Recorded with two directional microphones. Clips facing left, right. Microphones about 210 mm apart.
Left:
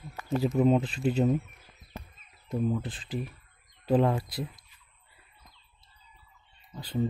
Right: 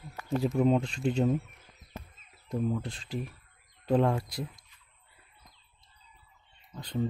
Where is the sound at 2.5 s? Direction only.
5° left (ahead or behind).